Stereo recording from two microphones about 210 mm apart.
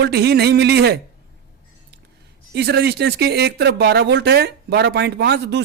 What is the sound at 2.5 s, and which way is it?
Speech, 50° right (ahead or behind).